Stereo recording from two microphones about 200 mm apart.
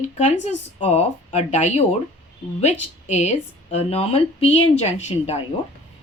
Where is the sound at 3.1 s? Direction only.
35° left (ahead or behind).